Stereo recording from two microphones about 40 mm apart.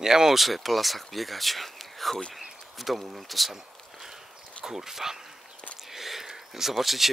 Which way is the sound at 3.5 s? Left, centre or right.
Centre.